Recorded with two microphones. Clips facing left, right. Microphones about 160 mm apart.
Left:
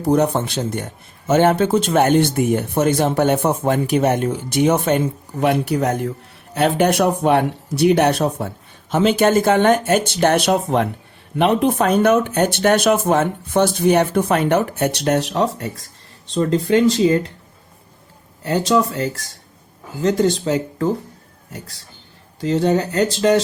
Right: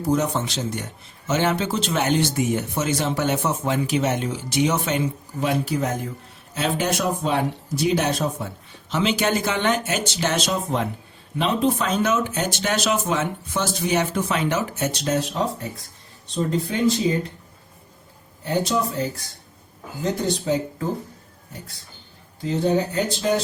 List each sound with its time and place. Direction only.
0.0 s a man's voice: 60° left (ahead or behind); by 17.3 s 90° left
18.4 s speech: 85° left
22.4 s speech: 85° left